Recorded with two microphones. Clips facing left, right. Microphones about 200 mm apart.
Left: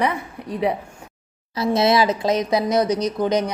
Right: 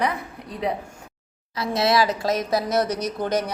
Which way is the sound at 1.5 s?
25° left (ahead or behind).